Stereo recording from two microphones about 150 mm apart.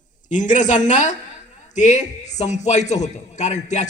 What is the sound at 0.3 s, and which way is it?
A man's voice, 55° left (ahead or behind).